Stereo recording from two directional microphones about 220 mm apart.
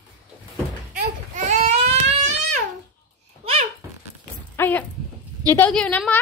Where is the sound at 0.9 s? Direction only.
35° right (ahead or behind).